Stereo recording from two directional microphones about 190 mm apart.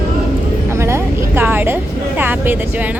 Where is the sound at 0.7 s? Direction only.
15° right (ahead or behind).